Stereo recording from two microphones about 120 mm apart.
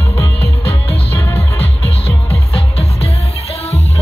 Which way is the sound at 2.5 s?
55° left (ahead or behind).